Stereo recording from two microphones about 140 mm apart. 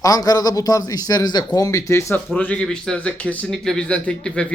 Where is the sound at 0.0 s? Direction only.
25° left (ahead or behind).